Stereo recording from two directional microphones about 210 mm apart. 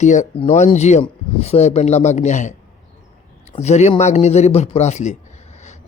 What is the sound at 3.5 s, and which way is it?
A man's voice, 30° left (ahead or behind).